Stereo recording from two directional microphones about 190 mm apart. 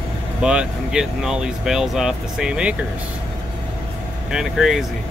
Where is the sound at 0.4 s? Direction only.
5° right (ahead or behind).